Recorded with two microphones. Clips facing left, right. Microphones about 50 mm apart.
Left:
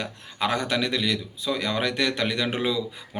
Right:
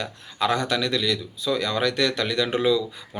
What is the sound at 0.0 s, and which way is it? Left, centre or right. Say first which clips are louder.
Speech: right 2 dB; left.